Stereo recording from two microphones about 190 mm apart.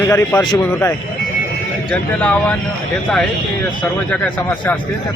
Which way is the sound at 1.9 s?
5° left (ahead or behind).